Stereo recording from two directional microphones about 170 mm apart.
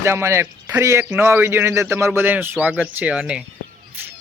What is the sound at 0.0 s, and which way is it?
A man's voice, 15° right (ahead or behind).